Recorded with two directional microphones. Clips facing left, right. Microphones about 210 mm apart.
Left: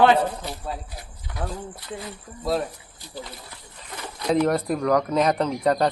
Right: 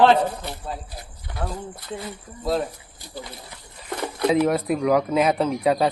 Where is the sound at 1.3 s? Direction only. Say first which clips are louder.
Right 1 dB; 25° right (ahead or behind).